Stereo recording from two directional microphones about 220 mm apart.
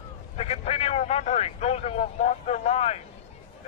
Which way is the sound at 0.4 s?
30° left (ahead or behind).